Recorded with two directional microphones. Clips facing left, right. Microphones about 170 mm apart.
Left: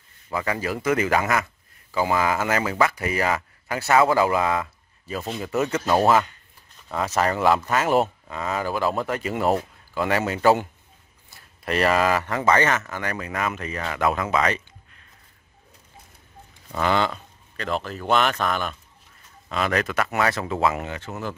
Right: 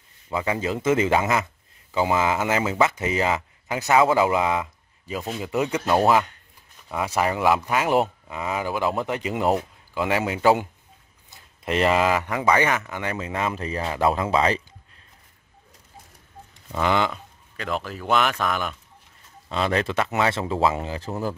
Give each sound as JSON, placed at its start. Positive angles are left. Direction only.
{"t": 0.3, "sound": "a man's voice", "side_deg": -20}
{"t": 16.8, "sound": "speech", "side_deg": -15}
{"t": 19.5, "sound": "speech", "side_deg": -30}